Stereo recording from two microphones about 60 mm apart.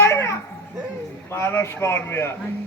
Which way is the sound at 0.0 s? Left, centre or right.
Left.